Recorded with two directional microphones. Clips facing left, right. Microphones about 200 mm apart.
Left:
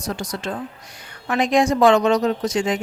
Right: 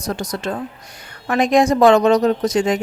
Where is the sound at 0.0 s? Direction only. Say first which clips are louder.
Right 3 dB; 40° right (ahead or behind).